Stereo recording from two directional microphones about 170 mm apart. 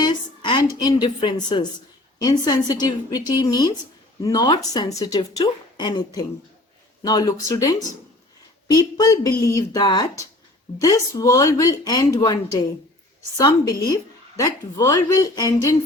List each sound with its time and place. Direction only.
0.0 s a sound: 25° left (ahead or behind)
2.1 s a woman's voice: 25° left (ahead or behind)
7.0 s a woman's voice: 25° left (ahead or behind)